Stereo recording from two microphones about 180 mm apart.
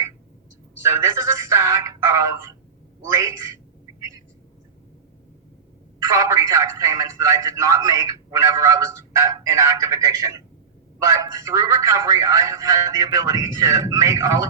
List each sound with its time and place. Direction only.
0.8 s a man's voice: 15° right (ahead or behind)
6.1 s a man's voice: 20° right (ahead or behind)